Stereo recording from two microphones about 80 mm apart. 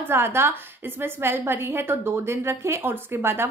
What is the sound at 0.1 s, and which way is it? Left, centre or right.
A woman's voice, right.